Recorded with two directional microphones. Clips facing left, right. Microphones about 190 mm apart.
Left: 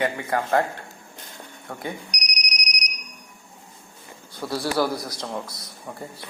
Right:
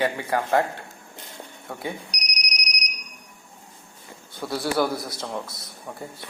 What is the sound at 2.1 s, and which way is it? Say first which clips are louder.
Alarm: left 1 dB; 30° right (ahead or behind).